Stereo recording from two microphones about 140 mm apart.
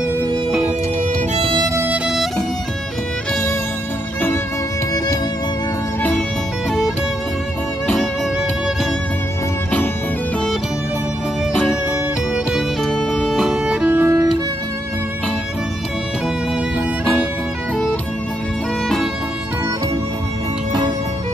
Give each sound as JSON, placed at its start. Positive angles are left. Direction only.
{"t": 2.0, "sound": "music", "side_deg": 0}
{"t": 4.9, "sound": "music", "side_deg": 25}
{"t": 12.5, "sound": "music", "side_deg": 5}
{"t": 17.0, "sound": "music", "side_deg": 5}